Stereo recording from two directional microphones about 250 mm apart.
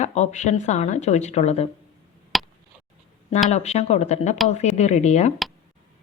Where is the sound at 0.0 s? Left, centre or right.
Left.